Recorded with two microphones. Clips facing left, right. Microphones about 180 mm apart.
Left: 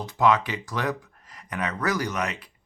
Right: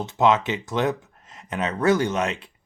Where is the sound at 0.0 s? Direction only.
25° right (ahead or behind).